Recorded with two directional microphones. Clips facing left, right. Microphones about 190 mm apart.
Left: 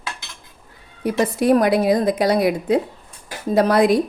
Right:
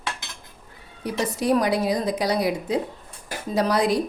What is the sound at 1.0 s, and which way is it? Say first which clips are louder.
A woman's voice: left 6 dB; 55° left (ahead or behind).